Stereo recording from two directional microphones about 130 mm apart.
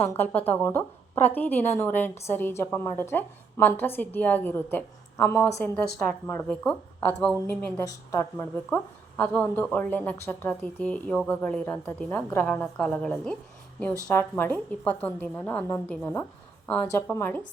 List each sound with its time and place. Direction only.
0.1 s a woman's voice: 15° left (ahead or behind)
7.9 s a woman's voice: 20° left (ahead or behind)
16.6 s a woman's voice: 10° left (ahead or behind)